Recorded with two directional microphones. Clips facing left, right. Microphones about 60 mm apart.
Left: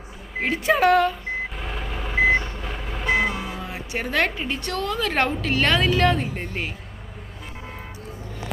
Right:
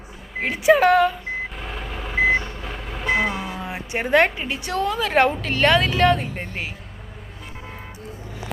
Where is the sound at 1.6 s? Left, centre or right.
Centre.